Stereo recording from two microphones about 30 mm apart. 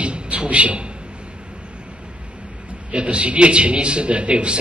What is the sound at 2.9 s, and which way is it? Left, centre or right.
A man's voice, right.